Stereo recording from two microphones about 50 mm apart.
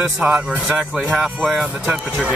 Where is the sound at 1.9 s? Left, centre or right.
Right.